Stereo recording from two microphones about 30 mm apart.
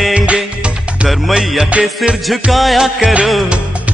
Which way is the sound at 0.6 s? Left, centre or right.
Right.